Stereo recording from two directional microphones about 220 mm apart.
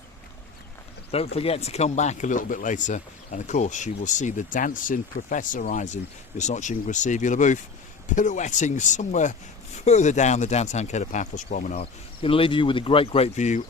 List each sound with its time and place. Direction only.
1.1 s speech: 25° left (ahead or behind)